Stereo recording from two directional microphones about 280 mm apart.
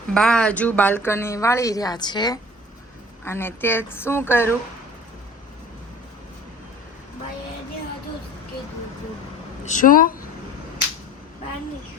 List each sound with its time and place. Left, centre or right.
0.1 s speech: centre
9.6 s a woman's voice: left